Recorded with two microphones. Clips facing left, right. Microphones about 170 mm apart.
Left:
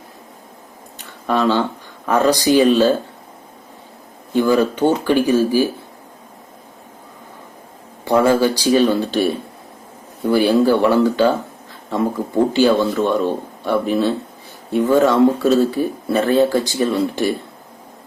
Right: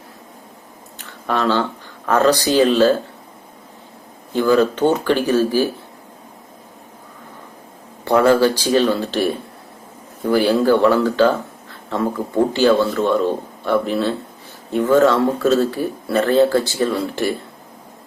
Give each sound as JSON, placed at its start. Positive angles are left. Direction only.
{"t": 1.3, "sound": "a man's voice", "side_deg": 15}
{"t": 4.4, "sound": "a man's voice", "side_deg": 15}
{"t": 8.0, "sound": "a man's voice", "side_deg": 10}
{"t": 10.2, "sound": "a man's voice", "side_deg": 15}